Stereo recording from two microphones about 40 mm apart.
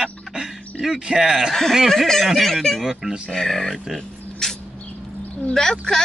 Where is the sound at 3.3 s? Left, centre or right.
Centre.